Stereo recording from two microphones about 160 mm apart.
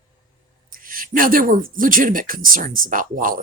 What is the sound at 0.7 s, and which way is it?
Speech, 60° right (ahead or behind).